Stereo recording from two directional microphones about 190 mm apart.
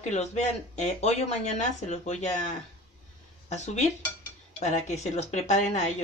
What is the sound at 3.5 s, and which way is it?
Speech, 35° left (ahead or behind).